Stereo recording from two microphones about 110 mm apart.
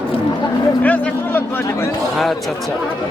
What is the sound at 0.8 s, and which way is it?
Speech, 15° left (ahead or behind).